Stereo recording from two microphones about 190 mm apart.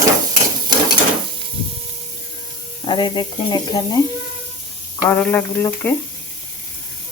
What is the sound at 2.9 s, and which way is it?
Speech, 25° left (ahead or behind).